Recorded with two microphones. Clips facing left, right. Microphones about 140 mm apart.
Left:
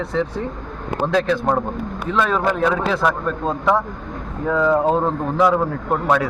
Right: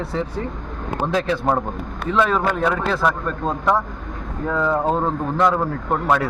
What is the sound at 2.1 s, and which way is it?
A man's voice, centre (ahead or behind).